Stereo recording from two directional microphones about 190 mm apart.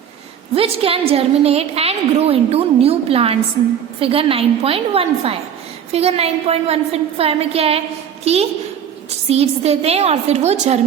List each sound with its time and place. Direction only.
0.5 s a woman's voice: 30° right (ahead or behind)